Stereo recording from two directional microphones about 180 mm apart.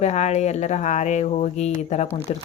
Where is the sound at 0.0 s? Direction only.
40° left (ahead or behind).